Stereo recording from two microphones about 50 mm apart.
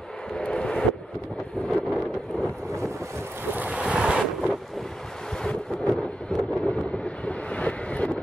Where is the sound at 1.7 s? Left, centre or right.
Centre.